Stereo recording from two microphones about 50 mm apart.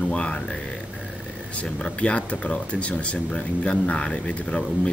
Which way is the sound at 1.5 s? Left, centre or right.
Left.